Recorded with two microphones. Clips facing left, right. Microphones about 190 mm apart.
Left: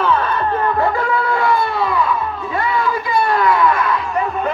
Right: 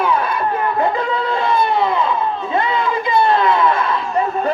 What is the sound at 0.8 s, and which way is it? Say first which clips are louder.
Crowd: left 1 dB; 20° right (ahead or behind).